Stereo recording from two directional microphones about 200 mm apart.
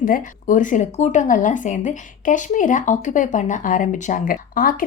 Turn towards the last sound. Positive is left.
turn(degrees=45)  # may be behind; listen again after turning